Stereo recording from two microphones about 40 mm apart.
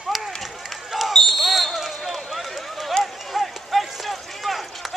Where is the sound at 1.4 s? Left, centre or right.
Centre.